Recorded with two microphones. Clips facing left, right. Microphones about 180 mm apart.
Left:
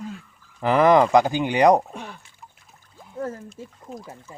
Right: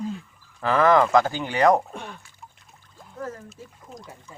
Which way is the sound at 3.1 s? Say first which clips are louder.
Left 4 dB; 30° left (ahead or behind).